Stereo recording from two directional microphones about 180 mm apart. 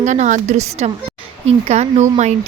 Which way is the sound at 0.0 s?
40° right (ahead or behind).